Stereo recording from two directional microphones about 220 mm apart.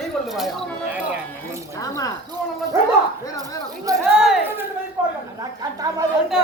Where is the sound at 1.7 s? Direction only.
15° left (ahead or behind).